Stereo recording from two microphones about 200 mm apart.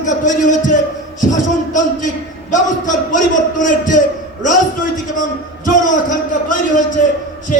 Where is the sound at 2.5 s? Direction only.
40° left (ahead or behind).